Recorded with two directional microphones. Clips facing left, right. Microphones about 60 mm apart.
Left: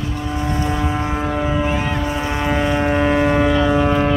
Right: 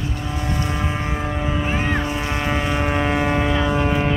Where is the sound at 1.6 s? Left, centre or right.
Right.